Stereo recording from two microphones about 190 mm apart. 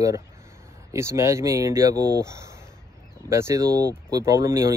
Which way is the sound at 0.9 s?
15° right (ahead or behind).